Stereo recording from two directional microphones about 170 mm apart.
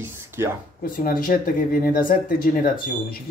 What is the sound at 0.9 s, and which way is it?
Speech, 60° left (ahead or behind).